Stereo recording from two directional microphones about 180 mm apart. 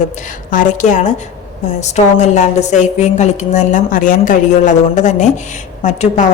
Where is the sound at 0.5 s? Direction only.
45° left (ahead or behind).